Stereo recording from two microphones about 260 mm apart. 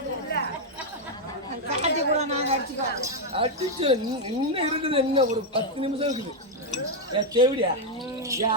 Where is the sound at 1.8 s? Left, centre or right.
Right.